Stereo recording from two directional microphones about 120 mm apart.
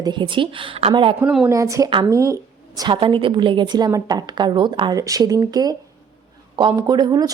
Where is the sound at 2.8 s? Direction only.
45° right (ahead or behind).